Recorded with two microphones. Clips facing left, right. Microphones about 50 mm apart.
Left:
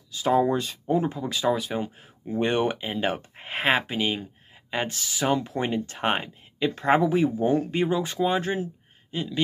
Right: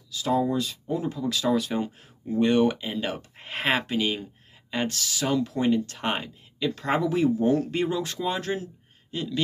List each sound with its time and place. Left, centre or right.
0.1 s speech: left; by 2.3 s centre
2.3 s speech: left